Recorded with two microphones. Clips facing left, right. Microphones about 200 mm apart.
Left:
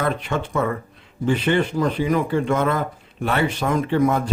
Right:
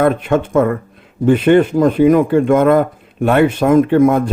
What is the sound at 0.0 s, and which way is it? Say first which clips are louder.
Speech: right 10 dB; 50° right (ahead or behind).